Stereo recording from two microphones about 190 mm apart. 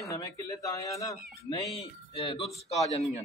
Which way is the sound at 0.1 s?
15° left (ahead or behind).